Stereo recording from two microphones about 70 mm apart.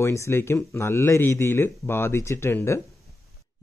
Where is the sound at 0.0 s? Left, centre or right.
Left.